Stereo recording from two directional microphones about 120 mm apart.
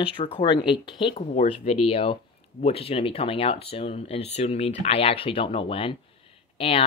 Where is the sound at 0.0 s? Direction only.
45° left (ahead or behind).